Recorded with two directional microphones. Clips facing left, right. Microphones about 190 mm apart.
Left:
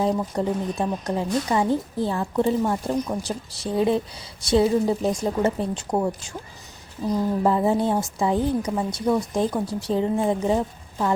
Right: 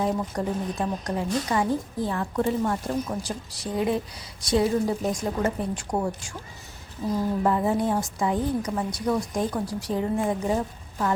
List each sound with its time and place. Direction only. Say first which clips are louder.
0.0 s speech: left 3 dB; 25° left (ahead or behind)
7.1 s speech: left 3 dB; 25° left (ahead or behind)